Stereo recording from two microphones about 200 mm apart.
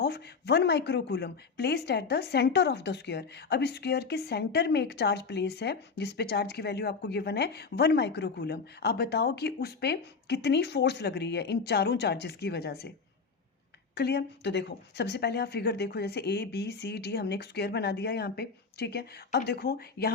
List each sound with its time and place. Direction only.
0.0 s speech: 55° left (ahead or behind)
13.9 s speech: 55° left (ahead or behind)